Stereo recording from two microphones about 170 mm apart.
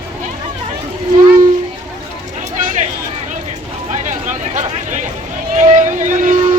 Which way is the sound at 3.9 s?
45° right (ahead or behind).